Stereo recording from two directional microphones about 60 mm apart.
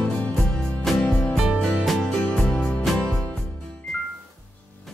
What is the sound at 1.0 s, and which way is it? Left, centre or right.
Music, centre.